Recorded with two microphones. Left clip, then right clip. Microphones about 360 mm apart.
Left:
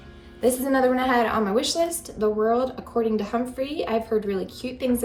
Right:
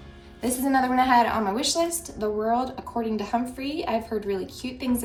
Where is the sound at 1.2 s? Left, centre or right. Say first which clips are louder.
Left 1 dB; right.